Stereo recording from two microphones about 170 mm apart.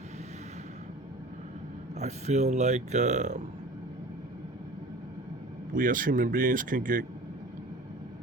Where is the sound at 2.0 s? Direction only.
40° right (ahead or behind).